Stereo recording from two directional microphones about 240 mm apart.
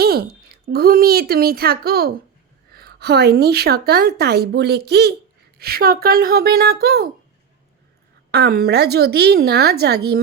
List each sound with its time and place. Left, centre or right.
0.0 s a woman's voice: right
8.3 s a woman's voice: right